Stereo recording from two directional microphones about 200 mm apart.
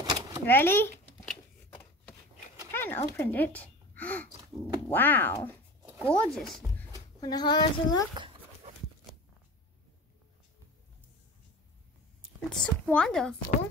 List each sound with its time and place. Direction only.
0.0 s a sound: 20° right (ahead or behind)
0.5 s shuffling cards: 10° left (ahead or behind)
2.7 s a sound: 10° left (ahead or behind)
3.2 s speech: 10° left (ahead or behind)
7.2 s a woman's voice: 20° left (ahead or behind)
12.4 s speech: 5° left (ahead or behind)